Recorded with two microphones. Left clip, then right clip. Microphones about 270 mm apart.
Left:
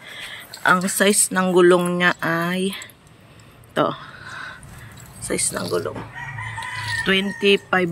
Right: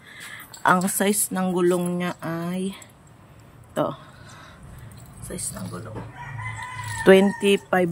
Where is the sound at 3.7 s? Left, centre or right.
Centre.